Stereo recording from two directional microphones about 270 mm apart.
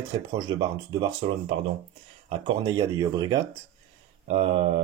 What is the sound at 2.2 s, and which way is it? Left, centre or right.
Speech, centre.